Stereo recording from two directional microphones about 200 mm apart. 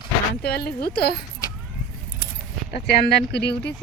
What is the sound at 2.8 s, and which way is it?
Speech, 55° left (ahead or behind).